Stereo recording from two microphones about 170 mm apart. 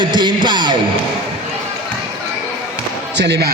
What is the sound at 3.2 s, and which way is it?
Speech, 80° right.